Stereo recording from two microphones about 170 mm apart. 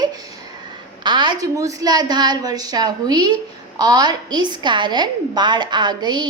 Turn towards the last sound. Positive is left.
turn(degrees=-25)  # may be behind; listen again after turning